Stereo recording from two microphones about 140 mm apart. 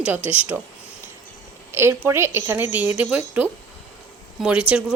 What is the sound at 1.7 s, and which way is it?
A woman's voice, 15° right (ahead or behind).